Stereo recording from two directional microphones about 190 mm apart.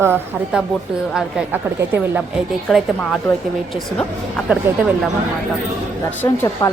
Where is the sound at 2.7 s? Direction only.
Centre (ahead or behind).